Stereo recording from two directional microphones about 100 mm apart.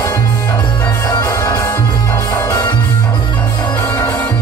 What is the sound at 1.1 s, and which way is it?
Music, 40° left (ahead or behind).